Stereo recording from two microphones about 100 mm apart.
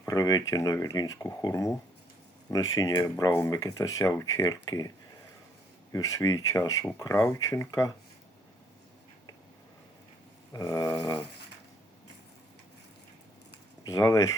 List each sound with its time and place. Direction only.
0.1 s speech: 40° left (ahead or behind)
5.9 s speech: 35° left (ahead or behind)
10.5 s speech: 35° left (ahead or behind)
13.8 s speech: 35° left (ahead or behind)